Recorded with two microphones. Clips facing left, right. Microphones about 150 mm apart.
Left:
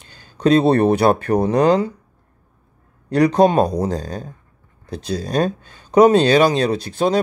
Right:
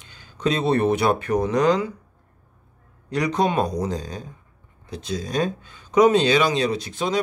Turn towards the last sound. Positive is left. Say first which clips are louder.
# left 6 dB
turn(degrees=35)  # may be behind; listen again after turning